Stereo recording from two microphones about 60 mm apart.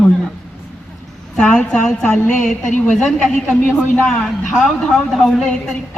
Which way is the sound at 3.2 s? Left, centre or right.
Centre.